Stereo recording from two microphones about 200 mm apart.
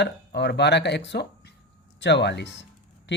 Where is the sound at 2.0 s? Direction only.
60° left (ahead or behind).